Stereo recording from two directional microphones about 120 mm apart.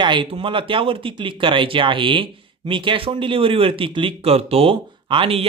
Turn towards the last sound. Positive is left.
turn(degrees=-50)  # may be behind; listen again after turning